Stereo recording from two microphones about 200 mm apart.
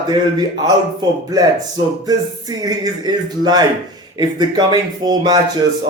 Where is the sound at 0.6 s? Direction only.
20° right (ahead or behind).